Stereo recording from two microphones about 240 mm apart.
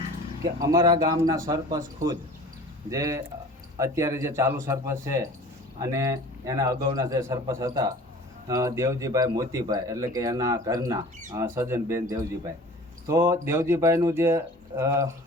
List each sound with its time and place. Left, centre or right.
0.6 s speech: centre